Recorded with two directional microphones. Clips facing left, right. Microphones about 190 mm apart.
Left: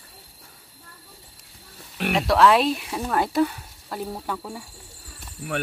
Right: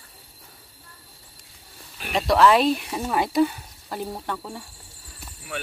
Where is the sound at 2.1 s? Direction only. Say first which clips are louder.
Even; centre (ahead or behind).